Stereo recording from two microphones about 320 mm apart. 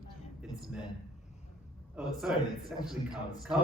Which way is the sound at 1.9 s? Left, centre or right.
Centre.